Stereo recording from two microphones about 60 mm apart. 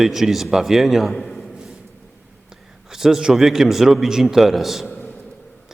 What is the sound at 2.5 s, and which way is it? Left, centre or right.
A man's voice, centre.